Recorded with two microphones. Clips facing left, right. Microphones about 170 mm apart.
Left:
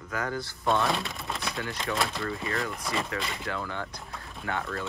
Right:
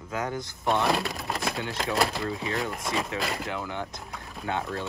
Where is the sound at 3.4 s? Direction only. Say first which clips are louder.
Right 1 dB; 15° right (ahead or behind).